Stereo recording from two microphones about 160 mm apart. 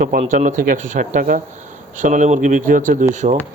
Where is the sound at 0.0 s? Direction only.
60° right (ahead or behind).